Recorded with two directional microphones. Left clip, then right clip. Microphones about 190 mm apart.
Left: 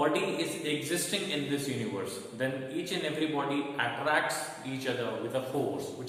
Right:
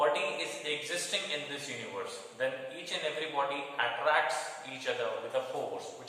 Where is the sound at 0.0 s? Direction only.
5° left (ahead or behind).